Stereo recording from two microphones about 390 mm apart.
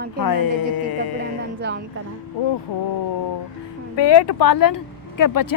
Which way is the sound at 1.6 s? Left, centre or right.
Right.